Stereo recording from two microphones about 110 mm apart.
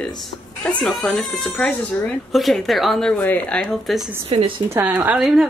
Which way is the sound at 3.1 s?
15° left (ahead or behind).